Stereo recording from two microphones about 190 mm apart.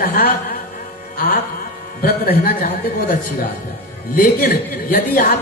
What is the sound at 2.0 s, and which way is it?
A man's voice, 50° left (ahead or behind).